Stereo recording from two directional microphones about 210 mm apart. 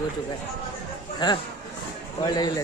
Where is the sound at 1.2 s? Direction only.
20° left (ahead or behind).